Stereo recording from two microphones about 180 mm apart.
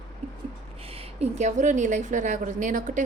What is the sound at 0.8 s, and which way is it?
A woman's voice, 35° right (ahead or behind).